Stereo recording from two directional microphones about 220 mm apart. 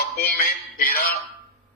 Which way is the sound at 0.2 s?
45° left (ahead or behind).